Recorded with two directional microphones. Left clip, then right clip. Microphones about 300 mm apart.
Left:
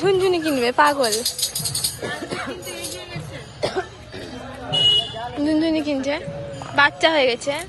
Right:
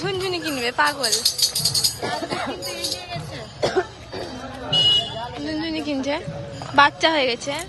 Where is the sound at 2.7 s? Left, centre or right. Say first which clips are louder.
Right 3 dB; right.